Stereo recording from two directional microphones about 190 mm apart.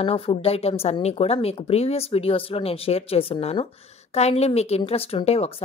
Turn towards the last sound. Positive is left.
turn(degrees=30)  # may be behind; listen again after turning